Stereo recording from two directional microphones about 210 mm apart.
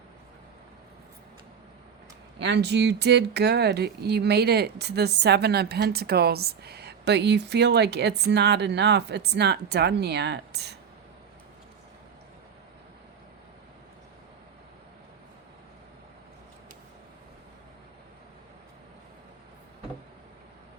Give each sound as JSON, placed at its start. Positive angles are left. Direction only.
{"t": 2.4, "sound": "speech", "side_deg": -55}